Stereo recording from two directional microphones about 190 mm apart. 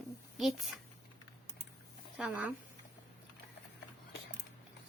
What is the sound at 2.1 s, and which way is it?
Speech, centre (ahead or behind).